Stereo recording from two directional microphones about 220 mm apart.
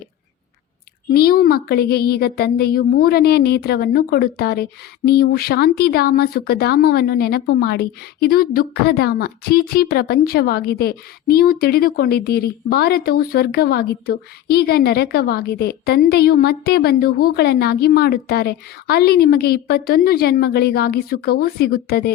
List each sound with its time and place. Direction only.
1.1 s speech: 45° left (ahead or behind)